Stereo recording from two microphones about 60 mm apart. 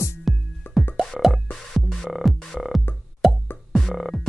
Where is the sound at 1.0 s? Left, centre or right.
Centre.